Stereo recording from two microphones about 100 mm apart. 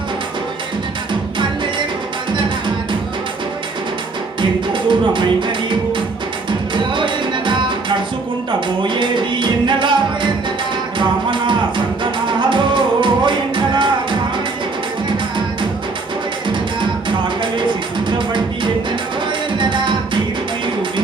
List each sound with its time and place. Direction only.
4.4 s music: 55° right (ahead or behind)
17.1 s music: 55° right (ahead or behind)